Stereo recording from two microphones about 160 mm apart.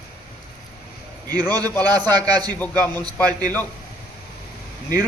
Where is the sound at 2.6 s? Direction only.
10° left (ahead or behind).